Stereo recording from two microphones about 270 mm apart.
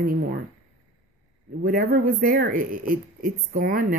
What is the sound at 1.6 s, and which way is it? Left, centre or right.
A woman's voice, right.